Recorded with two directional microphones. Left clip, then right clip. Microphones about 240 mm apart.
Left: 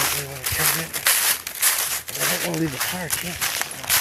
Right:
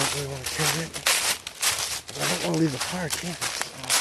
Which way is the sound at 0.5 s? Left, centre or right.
Left.